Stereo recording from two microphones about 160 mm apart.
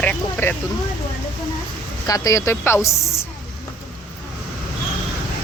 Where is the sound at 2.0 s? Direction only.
20° left (ahead or behind).